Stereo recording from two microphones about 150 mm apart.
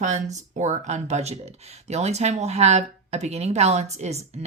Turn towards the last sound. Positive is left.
turn(degrees=-45)  # may be behind; listen again after turning